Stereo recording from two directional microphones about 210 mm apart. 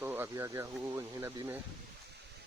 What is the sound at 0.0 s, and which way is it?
Speech, 10° right (ahead or behind).